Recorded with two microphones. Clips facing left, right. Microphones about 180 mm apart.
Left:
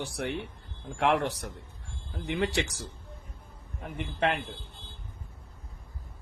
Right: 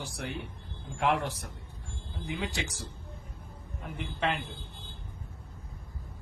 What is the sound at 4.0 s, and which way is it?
Speech, 60° left (ahead or behind).